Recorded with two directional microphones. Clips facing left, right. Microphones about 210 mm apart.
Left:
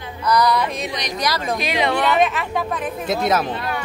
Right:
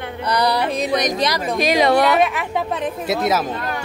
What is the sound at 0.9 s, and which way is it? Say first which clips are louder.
Speech: right 8 dB; 50° right (ahead or behind).